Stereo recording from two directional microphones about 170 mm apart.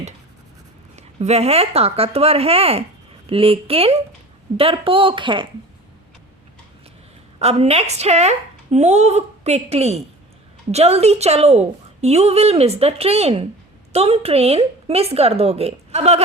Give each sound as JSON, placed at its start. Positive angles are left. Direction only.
{"t": 0.9, "sound": "speech", "side_deg": -40}
{"t": 7.3, "sound": "speech", "side_deg": -35}